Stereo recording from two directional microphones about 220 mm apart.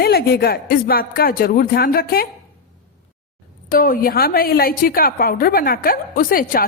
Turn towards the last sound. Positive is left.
turn(degrees=40)  # may be behind; listen again after turning